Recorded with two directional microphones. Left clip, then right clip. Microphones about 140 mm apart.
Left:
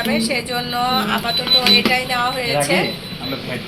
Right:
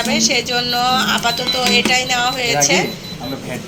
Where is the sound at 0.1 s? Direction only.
15° right (ahead or behind).